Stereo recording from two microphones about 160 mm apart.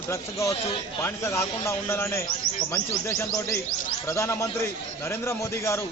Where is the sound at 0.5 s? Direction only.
35° left (ahead or behind).